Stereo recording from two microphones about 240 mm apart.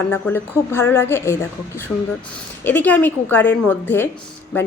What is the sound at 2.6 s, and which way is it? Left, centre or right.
A woman's voice, centre.